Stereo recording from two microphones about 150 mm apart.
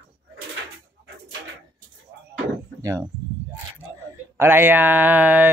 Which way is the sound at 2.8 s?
20° right (ahead or behind).